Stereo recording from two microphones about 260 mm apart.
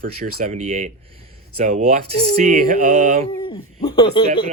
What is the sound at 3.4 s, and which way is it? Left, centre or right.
Owl, centre.